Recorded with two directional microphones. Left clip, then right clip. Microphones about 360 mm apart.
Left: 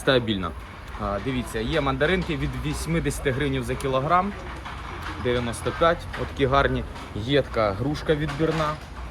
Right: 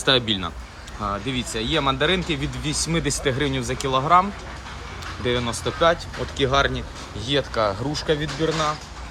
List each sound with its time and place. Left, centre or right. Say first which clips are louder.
0.0 s speech: right 2 dB; centre